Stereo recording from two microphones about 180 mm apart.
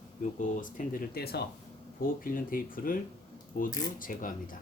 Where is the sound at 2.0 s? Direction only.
50° left (ahead or behind).